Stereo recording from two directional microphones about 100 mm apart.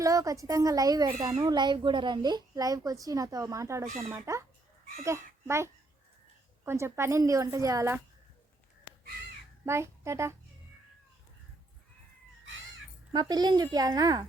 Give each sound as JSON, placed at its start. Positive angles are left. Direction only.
{"t": 0.0, "sound": "a child's voice", "side_deg": -35}
{"t": 9.6, "sound": "a child's voice", "side_deg": -25}
{"t": 13.1, "sound": "speech", "side_deg": -40}